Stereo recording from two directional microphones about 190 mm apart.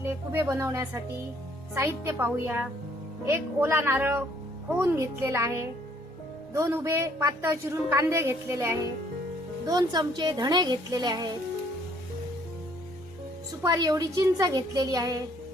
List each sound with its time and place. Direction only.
0.0 s a woman's voice: 10° right (ahead or behind)
13.6 s a woman's voice: 20° right (ahead or behind)